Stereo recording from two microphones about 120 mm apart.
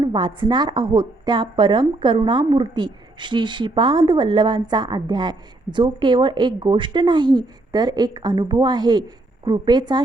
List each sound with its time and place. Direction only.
0.0 s a woman's voice: 40° right (ahead or behind)